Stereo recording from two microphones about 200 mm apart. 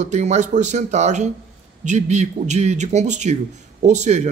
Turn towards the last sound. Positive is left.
turn(degrees=-35)  # may be behind; listen again after turning